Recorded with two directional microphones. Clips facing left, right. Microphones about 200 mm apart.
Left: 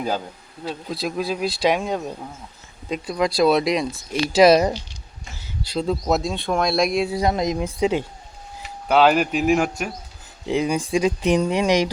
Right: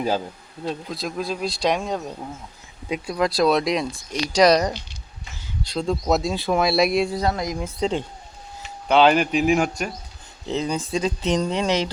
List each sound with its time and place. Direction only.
0.6 s speech: centre (ahead or behind)
7.1 s speech: 15° left (ahead or behind)
7.8 s speech: 10° left (ahead or behind)